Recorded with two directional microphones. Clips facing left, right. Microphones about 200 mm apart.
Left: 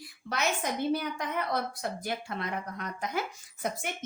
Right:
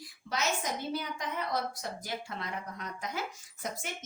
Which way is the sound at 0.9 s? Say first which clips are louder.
Left 5 dB; 60° left (ahead or behind).